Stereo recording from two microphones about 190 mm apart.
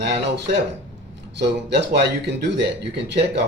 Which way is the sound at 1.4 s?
60° right (ahead or behind).